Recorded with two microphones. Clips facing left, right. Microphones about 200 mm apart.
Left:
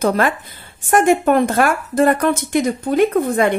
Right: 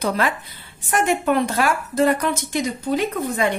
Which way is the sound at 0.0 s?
45° left (ahead or behind).